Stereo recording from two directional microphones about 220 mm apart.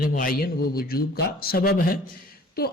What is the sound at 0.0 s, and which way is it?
A man's voice, 40° left (ahead or behind).